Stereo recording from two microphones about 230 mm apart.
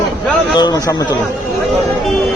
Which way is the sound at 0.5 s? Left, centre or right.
Centre.